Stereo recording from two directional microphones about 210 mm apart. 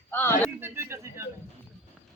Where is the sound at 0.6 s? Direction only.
10° right (ahead or behind).